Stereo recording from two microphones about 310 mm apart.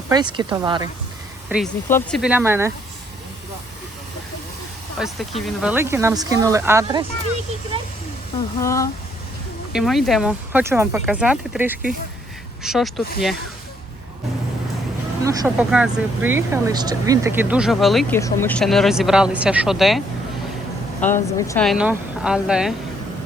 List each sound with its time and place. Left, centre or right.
0.1 s speech: centre
1.5 s speech: centre
5.0 s speech: centre
8.6 s speech: centre
15.2 s speech: centre
21.1 s speech: centre